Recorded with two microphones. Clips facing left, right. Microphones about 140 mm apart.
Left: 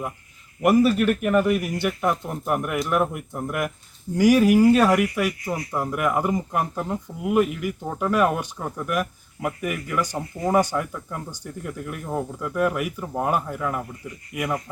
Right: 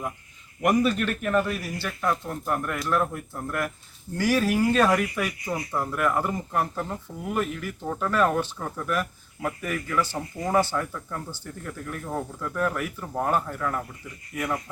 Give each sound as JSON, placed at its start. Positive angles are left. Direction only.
{"t": 0.6, "sound": "speech", "side_deg": 5}